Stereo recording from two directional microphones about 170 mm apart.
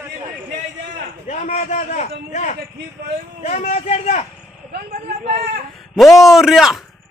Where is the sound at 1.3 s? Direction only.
45° left (ahead or behind).